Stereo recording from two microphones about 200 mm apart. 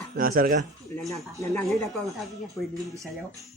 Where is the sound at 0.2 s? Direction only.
45° right (ahead or behind).